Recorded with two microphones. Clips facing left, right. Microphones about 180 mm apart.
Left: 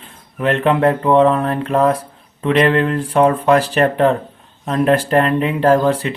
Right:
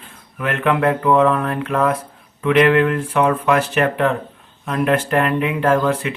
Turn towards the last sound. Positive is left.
turn(degrees=35)  # may be behind; listen again after turning